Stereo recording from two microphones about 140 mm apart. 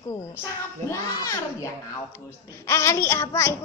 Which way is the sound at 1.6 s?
20° left (ahead or behind).